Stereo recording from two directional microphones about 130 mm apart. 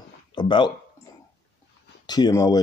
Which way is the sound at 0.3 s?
35° left (ahead or behind).